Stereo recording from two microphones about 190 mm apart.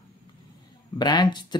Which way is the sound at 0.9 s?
25° left (ahead or behind).